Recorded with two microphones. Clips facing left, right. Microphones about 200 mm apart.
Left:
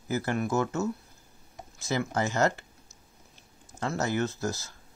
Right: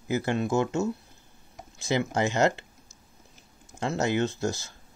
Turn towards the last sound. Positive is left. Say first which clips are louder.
# right 3 dB
turn(degrees=-25)  # may be behind; listen again after turning